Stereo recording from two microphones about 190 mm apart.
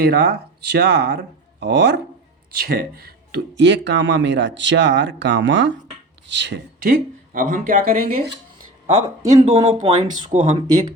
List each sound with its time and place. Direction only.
0.0 s speech: 55° right (ahead or behind)
9.0 s speech: 20° right (ahead or behind)
9.5 s speech: 35° right (ahead or behind)